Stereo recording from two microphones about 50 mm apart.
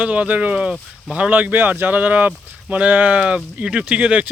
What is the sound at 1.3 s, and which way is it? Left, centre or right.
Speech, right.